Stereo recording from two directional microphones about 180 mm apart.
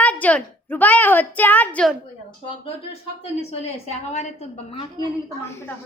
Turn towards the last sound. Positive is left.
turn(degrees=15)  # may be behind; listen again after turning